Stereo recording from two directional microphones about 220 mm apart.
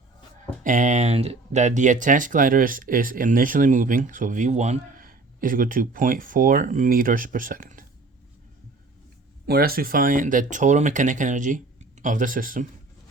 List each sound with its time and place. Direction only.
0.6 s speech: 35° right (ahead or behind)
9.5 s speech: 45° right (ahead or behind)